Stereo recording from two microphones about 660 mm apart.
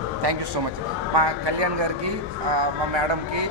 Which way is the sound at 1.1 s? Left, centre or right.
Right.